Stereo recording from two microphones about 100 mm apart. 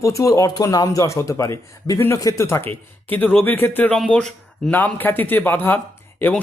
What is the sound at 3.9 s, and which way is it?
Speech, 5° left (ahead or behind).